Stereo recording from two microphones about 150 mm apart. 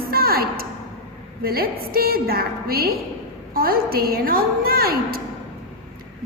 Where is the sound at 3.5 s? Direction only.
80° right.